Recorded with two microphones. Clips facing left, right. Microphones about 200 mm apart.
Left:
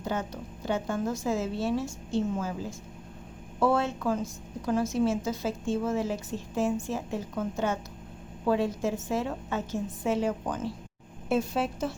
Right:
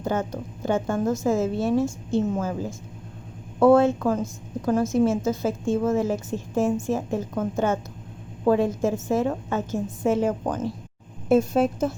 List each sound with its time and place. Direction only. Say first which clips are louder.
0.0 s a woman's voice: right 6 dB; 50° right (ahead or behind)